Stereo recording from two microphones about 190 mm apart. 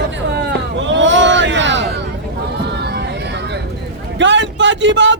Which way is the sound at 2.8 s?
60° right (ahead or behind).